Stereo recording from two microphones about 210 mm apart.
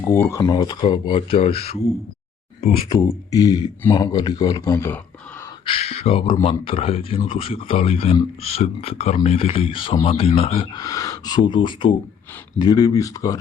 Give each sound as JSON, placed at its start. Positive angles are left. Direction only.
{"t": 0.1, "sound": "speech", "side_deg": 10}
{"t": 2.9, "sound": "speech", "side_deg": 15}
{"t": 5.6, "sound": "speech", "side_deg": 25}